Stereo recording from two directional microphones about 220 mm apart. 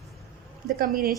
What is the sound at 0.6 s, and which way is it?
Speech, 40° right (ahead or behind).